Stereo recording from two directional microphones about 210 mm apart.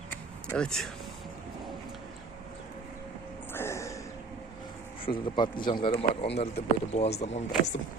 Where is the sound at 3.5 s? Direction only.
10° left (ahead or behind).